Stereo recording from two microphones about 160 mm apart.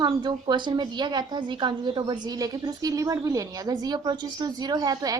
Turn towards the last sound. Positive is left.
turn(degrees=-25)  # may be behind; listen again after turning